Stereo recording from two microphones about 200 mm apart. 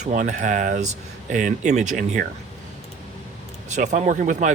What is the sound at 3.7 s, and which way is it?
Speech, 35° right (ahead or behind).